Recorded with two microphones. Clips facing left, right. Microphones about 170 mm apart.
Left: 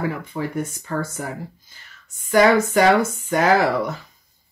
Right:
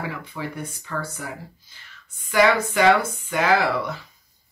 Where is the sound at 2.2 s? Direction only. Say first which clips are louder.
Left 4 dB; 45° left (ahead or behind).